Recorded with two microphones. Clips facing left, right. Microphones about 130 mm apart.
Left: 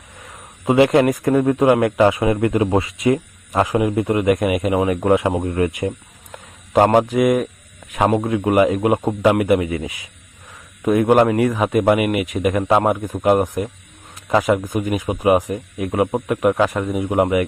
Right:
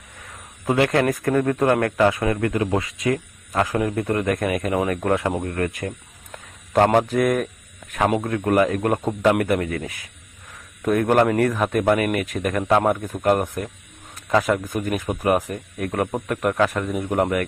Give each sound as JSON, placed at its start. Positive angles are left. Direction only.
{"t": 0.6, "sound": "a man's voice", "side_deg": 20}
{"t": 5.0, "sound": "speech", "side_deg": 20}